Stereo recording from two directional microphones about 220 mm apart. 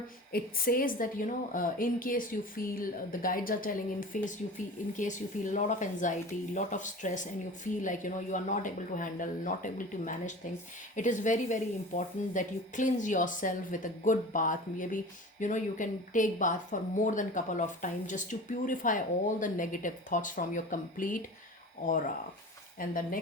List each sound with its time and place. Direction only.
0.3 s speech: 40° left (ahead or behind)